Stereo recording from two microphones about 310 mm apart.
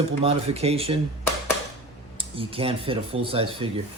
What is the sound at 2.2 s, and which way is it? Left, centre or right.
Speech, centre.